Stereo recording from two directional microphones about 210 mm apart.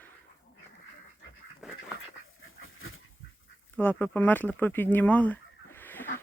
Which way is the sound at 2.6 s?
75° left (ahead or behind).